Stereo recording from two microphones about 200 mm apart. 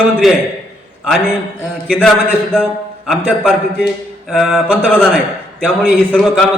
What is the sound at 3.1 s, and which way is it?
A man's voice, 5° right (ahead or behind).